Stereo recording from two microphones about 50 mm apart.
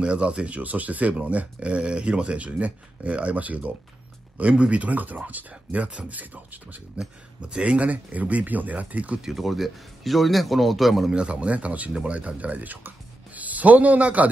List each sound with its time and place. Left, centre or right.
0.0 s speech: right
7.0 s speech: centre
9.2 s a man's voice: centre
11.1 s speech: right